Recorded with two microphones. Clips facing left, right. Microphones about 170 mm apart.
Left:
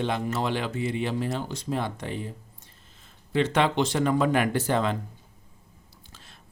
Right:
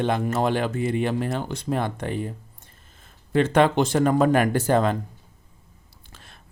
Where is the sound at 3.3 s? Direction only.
50° right (ahead or behind).